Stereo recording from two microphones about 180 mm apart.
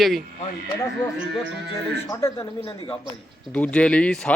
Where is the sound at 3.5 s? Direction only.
5° left (ahead or behind).